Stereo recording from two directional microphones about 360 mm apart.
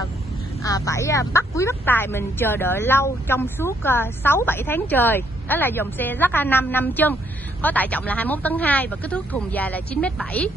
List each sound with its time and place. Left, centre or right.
0.7 s speech: centre